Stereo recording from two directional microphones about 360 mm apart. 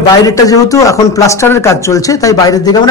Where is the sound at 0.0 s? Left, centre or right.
Centre.